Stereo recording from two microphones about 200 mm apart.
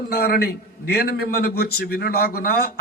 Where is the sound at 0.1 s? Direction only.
50° left (ahead or behind).